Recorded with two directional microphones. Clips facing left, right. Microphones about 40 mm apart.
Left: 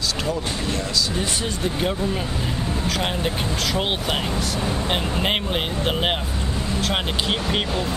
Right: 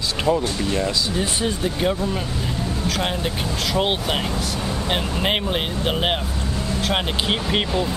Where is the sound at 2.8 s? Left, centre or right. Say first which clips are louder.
Right 1 dB; centre.